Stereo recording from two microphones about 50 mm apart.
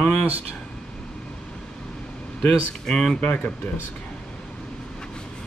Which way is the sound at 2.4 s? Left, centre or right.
Centre.